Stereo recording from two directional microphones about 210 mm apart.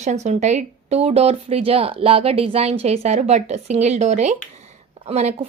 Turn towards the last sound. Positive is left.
turn(degrees=-30)  # may be behind; listen again after turning